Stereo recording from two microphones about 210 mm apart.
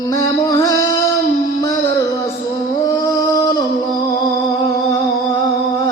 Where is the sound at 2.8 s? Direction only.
15° left (ahead or behind).